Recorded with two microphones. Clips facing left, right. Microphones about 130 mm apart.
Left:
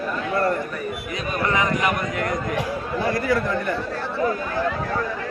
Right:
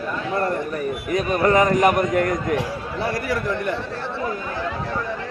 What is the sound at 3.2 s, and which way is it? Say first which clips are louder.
Speech: left 1 dB; 15° right (ahead or behind).